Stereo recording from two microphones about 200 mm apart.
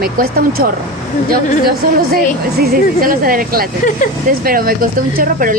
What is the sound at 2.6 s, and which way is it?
Speech, 45° right (ahead or behind).